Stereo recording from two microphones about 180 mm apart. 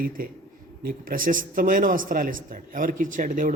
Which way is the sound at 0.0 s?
50° right (ahead or behind).